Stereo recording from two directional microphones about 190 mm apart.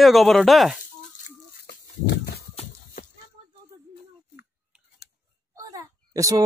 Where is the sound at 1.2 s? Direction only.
45° left (ahead or behind).